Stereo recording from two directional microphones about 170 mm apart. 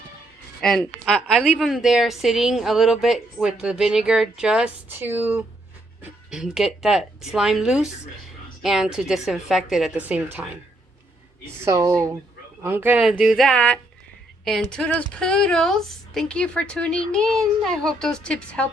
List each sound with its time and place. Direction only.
0.6 s a woman's voice: centre (ahead or behind)
11.6 s a woman's voice: 15° right (ahead or behind); by 18.7 s 5° left (ahead or behind)